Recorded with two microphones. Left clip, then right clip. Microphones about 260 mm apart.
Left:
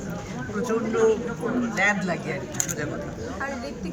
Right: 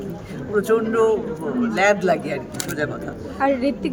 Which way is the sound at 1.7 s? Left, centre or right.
Right.